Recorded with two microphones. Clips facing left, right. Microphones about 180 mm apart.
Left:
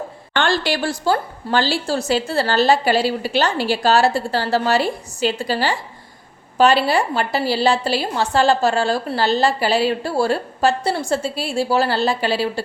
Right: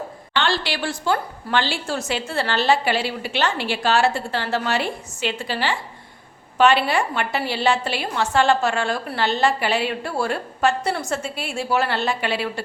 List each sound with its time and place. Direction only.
0.3 s a woman's voice: 45° left (ahead or behind)